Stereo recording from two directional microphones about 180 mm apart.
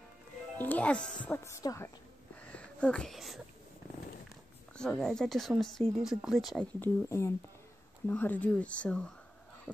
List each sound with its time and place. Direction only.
0.6 s a woman's voice: 10° left (ahead or behind)
2.4 s a sound: 5° left (ahead or behind)
4.7 s speech: 5° left (ahead or behind)
6.8 s speech: 15° left (ahead or behind)